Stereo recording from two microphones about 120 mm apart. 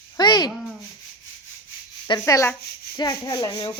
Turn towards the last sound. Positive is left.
turn(degrees=35)  # may be behind; listen again after turning